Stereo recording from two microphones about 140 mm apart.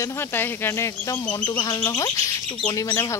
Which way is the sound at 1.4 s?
35° left (ahead or behind).